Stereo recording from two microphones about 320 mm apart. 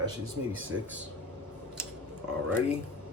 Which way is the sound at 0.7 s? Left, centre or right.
Right.